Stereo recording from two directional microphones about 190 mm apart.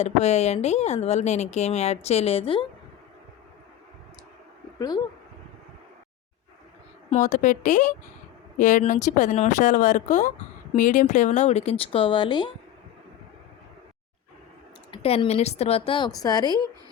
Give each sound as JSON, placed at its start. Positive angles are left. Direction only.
{"t": 0.0, "sound": "speech", "side_deg": 35}
{"t": 4.8, "sound": "speech", "side_deg": 20}
{"t": 7.1, "sound": "speech", "side_deg": 40}
{"t": 14.8, "sound": "speech", "side_deg": 30}